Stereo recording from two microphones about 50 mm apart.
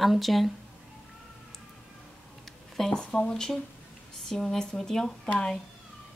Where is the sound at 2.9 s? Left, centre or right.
Left.